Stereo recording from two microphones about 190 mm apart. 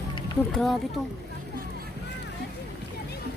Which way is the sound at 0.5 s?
Centre (ahead or behind).